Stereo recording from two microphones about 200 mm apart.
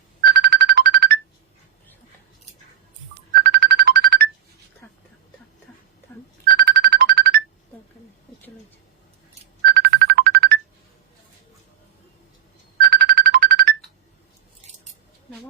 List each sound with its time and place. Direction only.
0.3 s music: 50° right (ahead or behind)
3.4 s music: 50° right (ahead or behind)
4.8 s a sound: 10° left (ahead or behind)
6.5 s music: 45° right (ahead or behind)
9.6 s ringtone: 50° right (ahead or behind)
12.8 s music: 50° right (ahead or behind)